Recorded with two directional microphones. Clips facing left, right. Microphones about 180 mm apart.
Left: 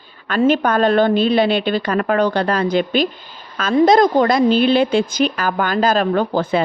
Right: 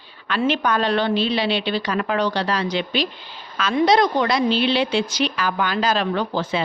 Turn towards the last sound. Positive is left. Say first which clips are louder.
# left 6 dB
turn(degrees=50)  # may be behind; listen again after turning